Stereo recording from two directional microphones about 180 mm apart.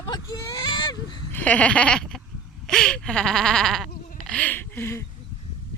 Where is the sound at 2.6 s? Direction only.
5° left (ahead or behind).